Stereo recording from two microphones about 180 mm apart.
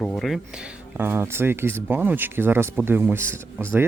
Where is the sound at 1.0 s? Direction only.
10° right (ahead or behind).